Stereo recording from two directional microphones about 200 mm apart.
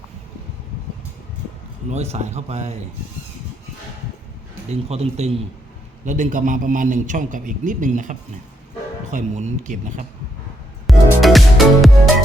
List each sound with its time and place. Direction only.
1.9 s a man's voice: 35° right (ahead or behind)
4.7 s a man's voice: 30° right (ahead or behind)
10.8 s music: centre (ahead or behind)